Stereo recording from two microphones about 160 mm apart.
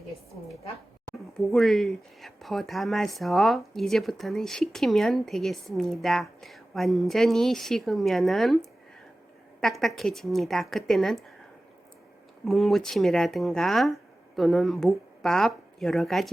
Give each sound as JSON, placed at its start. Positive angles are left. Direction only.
{"t": 1.3, "sound": "speech", "side_deg": 0}
{"t": 9.6, "sound": "speech", "side_deg": 0}
{"t": 12.5, "sound": "speech", "side_deg": 0}